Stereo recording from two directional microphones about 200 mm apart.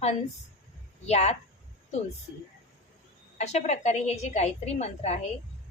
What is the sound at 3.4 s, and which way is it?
A woman's voice, 35° left (ahead or behind).